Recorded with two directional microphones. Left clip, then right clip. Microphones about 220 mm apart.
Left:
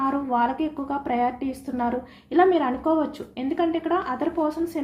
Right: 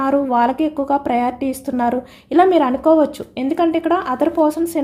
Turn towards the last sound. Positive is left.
turn(degrees=-50)  # may be behind; listen again after turning